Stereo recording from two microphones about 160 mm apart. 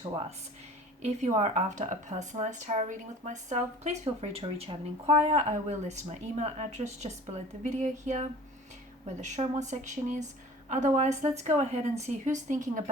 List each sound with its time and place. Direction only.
0.1 s speech: 35° right (ahead or behind)
1.0 s speech: 45° right (ahead or behind)
9.6 s speech: 50° right (ahead or behind)